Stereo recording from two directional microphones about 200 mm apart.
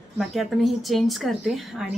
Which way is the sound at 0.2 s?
Centre (ahead or behind).